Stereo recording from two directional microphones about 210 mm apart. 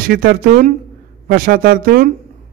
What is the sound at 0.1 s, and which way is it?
A man's voice, 45° right (ahead or behind).